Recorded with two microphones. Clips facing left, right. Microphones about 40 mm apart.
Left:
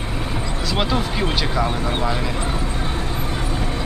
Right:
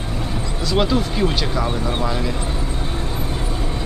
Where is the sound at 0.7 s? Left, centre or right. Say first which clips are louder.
Right 3 dB; centre.